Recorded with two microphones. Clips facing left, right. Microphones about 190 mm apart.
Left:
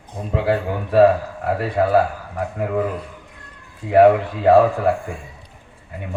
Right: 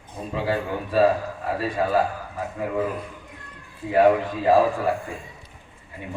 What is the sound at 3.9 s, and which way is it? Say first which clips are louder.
Speech: left 5 dB; 65° left (ahead or behind).